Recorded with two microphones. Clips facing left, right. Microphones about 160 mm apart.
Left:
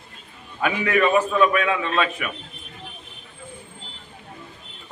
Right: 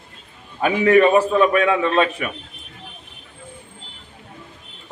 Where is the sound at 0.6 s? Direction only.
30° right (ahead or behind).